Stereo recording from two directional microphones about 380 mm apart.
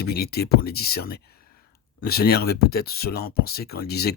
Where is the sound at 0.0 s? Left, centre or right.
Left.